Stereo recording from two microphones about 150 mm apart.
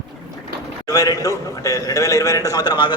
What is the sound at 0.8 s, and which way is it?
A man's voice, 25° left (ahead or behind).